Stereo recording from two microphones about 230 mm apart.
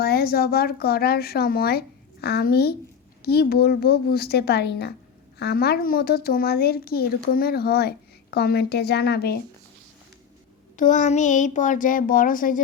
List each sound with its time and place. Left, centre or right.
0.0 s speech: left
10.8 s speech: left